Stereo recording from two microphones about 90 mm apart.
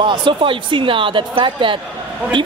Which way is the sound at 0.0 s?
65° right (ahead or behind).